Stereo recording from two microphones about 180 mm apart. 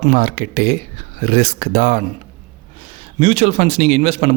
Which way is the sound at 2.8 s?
30° right (ahead or behind).